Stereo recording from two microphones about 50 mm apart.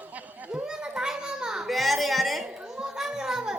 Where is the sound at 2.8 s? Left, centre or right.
Centre.